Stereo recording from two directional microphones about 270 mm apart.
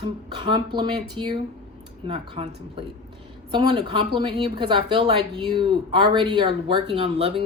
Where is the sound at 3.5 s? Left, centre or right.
Centre.